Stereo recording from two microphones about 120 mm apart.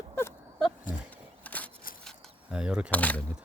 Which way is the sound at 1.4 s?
10° left (ahead or behind).